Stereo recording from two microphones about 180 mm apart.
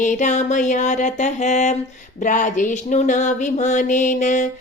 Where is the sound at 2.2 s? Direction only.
45° left (ahead or behind).